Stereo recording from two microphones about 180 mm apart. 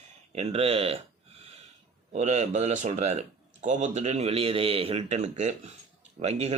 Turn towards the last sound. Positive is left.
turn(degrees=-35)  # may be behind; listen again after turning